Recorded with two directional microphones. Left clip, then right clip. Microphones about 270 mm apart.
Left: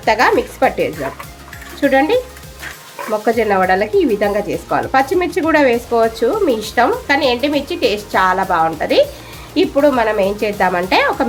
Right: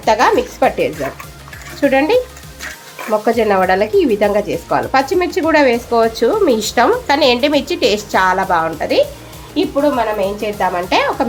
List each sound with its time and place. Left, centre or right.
0.0 s speech: centre
9.6 s speech: centre